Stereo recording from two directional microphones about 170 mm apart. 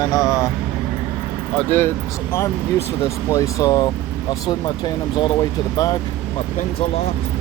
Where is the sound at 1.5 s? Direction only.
15° left (ahead or behind).